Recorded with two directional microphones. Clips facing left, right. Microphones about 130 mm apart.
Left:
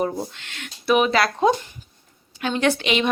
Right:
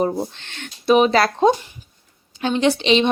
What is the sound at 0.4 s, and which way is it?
Speech, 30° right (ahead or behind).